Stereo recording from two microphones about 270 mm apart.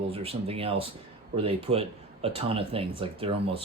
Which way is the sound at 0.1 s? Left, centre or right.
Right.